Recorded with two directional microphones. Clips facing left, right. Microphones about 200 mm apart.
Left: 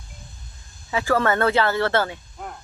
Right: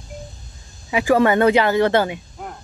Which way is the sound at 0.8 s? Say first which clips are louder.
Right 5 dB; 15° right (ahead or behind).